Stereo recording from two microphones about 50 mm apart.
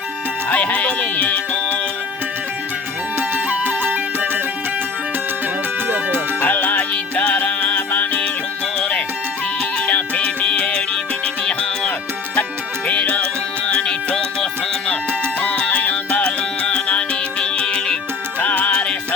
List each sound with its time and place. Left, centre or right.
0.5 s music: left
3.2 s music: right
5.9 s music: right
6.4 s music: left
9.8 s music: left
12.9 s music: left
13.7 s music: centre
15.4 s music: left
16.2 s music: left
18.3 s music: left
18.7 s music: left